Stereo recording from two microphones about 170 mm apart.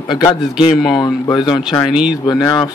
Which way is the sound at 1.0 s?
20° left (ahead or behind).